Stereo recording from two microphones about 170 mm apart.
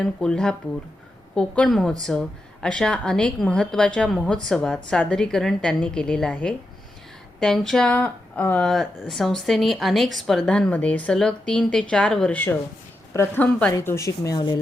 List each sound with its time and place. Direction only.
0.0 s a woman's voice: 5° left (ahead or behind); by 14.6 s 25° left (ahead or behind)